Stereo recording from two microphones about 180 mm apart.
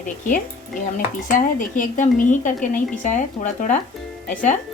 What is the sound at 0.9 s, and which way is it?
Speech, 45° left (ahead or behind).